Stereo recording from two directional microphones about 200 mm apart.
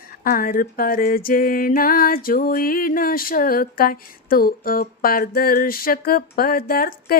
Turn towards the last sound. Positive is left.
turn(degrees=45)  # may be behind; listen again after turning